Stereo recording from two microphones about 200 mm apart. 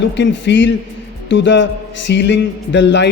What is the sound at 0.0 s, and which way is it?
A man's voice, 60° left (ahead or behind).